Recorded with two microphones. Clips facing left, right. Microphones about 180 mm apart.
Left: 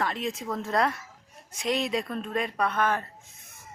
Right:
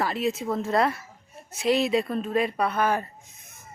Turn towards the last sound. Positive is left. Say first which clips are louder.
# right 2 dB
turn(degrees=-10)  # may be behind; listen again after turning